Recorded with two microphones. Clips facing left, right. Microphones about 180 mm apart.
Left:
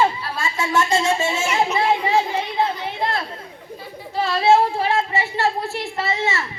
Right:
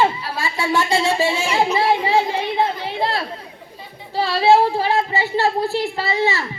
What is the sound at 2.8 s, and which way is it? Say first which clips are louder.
Chatter: right 2 dB; 30° right (ahead or behind).